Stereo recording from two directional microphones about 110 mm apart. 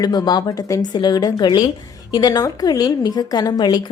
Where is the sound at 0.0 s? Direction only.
40° left (ahead or behind).